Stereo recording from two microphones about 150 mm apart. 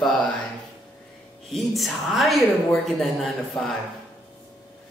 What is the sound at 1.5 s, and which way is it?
Speech, centre (ahead or behind).